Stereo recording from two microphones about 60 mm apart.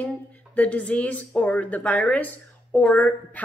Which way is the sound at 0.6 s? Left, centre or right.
Left.